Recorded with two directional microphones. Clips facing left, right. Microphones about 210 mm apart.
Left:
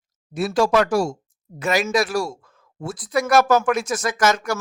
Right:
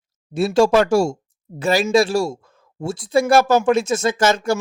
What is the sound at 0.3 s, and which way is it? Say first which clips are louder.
Speech: right 4 dB; 25° right (ahead or behind).